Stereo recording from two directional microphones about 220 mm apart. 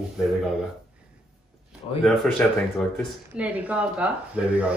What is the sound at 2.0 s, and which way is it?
Speech, centre (ahead or behind).